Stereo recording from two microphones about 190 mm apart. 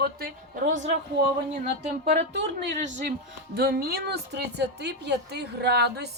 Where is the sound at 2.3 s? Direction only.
65° right (ahead or behind).